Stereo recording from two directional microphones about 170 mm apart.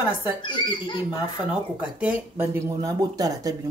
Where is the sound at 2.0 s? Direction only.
15° right (ahead or behind).